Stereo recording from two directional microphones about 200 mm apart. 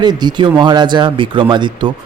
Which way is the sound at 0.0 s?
20° right (ahead or behind).